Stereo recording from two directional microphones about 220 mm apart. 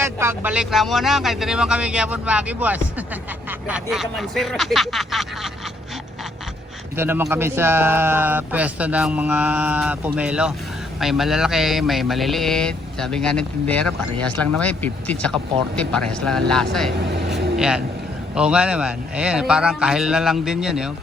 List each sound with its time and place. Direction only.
0.0 s mantra: 10° right (ahead or behind)
6.9 s speech: 10° right (ahead or behind)
11.0 s mantra: centre (ahead or behind)